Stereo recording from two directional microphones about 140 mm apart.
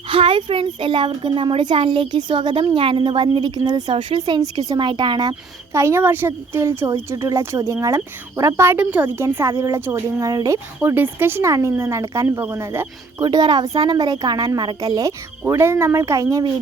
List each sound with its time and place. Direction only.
0.1 s speech: 40° right (ahead or behind)
5.7 s a woman's voice: 20° right (ahead or behind)
10.8 s a woman's voice: 15° right (ahead or behind)
13.2 s a woman's voice: 30° right (ahead or behind)